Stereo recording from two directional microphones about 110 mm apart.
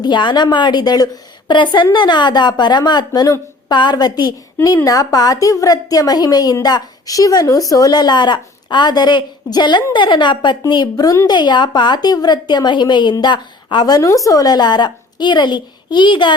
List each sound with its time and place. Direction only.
0.0 s a woman's voice: 45° left (ahead or behind)